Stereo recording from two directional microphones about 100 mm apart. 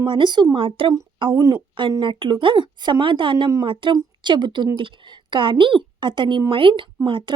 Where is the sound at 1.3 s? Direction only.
35° right (ahead or behind).